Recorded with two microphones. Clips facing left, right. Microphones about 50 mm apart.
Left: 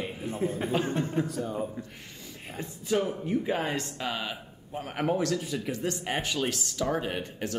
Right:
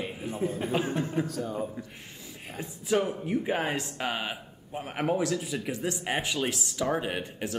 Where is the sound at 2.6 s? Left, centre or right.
Centre.